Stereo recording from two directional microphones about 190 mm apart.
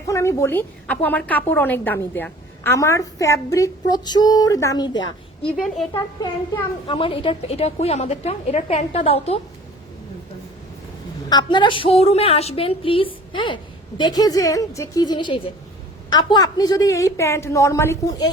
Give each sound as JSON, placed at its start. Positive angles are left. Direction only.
{"t": 0.1, "sound": "a woman's voice", "side_deg": 15}
{"t": 5.5, "sound": "a woman's voice", "side_deg": 0}
{"t": 6.8, "sound": "a woman's voice", "side_deg": 25}
{"t": 11.3, "sound": "a woman's voice", "side_deg": 25}